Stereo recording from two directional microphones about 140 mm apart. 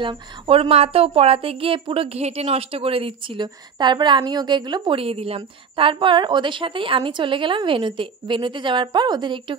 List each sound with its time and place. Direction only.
0.0 s speech: 40° right (ahead or behind)